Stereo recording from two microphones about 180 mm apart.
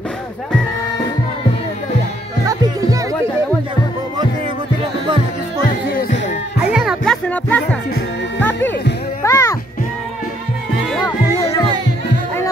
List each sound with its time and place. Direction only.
2.4 s music: 20° right (ahead or behind)
6.7 s music: centre (ahead or behind)
9.2 s music: 15° left (ahead or behind)
10.9 s music: centre (ahead or behind)